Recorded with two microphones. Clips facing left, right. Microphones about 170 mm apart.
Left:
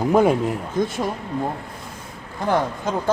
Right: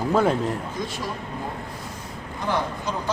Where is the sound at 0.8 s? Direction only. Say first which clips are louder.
Left 9 dB; 55° left (ahead or behind).